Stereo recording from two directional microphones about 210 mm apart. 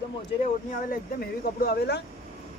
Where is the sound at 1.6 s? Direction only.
50° left (ahead or behind).